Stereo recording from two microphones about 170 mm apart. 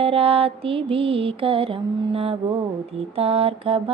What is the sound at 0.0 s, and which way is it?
Female singing, 35° right (ahead or behind).